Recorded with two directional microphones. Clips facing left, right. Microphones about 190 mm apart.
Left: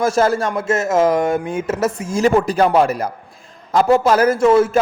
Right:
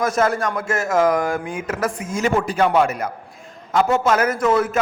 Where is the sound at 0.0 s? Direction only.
30° left (ahead or behind).